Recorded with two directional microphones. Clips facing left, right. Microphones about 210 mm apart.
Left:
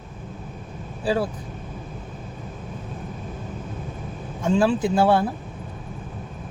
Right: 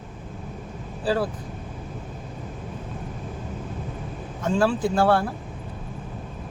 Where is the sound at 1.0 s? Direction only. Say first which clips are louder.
Left 1 dB; 10° left (ahead or behind).